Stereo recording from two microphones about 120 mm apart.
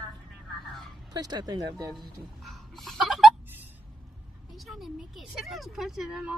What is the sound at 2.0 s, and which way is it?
Speech, centre (ahead or behind).